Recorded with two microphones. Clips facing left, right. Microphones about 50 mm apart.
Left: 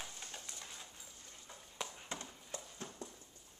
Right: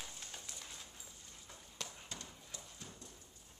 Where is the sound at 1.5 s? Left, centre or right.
Centre.